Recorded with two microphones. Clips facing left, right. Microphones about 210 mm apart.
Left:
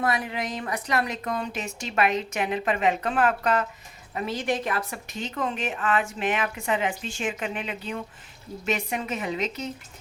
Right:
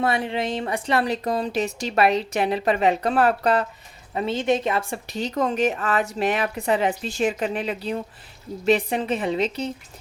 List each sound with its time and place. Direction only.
0.0 s a woman's voice: 30° right (ahead or behind)